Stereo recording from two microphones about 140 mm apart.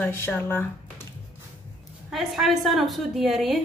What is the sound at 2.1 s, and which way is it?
A woman's voice, centre (ahead or behind).